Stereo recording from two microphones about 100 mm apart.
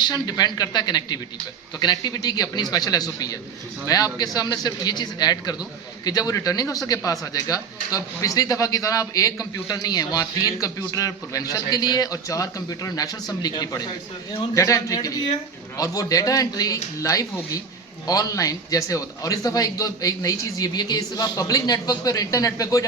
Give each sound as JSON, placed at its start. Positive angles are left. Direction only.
{"t": 0.0, "sound": "speech", "side_deg": 40}